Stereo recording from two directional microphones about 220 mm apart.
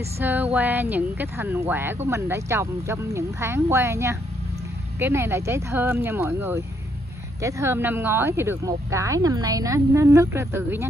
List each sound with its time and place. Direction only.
0.2 s speech: 10° right (ahead or behind)